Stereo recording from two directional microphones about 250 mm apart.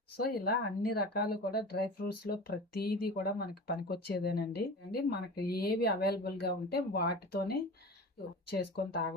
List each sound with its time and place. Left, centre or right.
0.2 s speech: left